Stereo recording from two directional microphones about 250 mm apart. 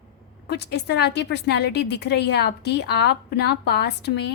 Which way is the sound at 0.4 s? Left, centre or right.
Left.